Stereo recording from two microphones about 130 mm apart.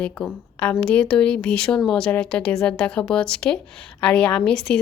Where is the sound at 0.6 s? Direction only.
10° left (ahead or behind).